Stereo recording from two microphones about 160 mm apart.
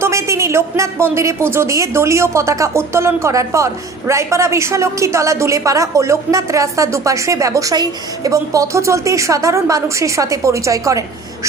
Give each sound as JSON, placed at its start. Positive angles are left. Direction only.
{"t": 0.0, "sound": "a woman's voice", "side_deg": -20}